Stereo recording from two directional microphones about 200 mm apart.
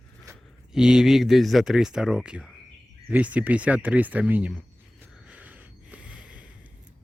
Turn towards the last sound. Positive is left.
turn(degrees=-5)  # may be behind; listen again after turning